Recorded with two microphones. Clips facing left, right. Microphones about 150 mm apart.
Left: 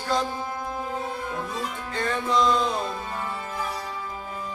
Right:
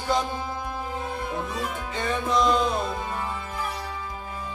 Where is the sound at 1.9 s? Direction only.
15° right (ahead or behind).